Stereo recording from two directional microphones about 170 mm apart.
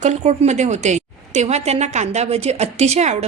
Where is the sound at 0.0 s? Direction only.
40° right (ahead or behind).